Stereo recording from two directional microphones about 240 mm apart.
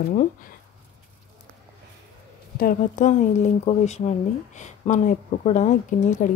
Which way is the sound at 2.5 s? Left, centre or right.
Left.